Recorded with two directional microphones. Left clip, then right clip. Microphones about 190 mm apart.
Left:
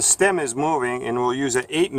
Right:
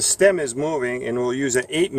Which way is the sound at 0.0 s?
25° left (ahead or behind).